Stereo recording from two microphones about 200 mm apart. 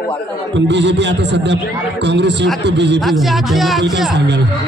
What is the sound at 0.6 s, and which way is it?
A man's voice, 60° right (ahead or behind).